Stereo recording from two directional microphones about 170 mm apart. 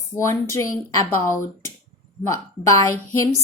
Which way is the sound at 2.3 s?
20° left (ahead or behind).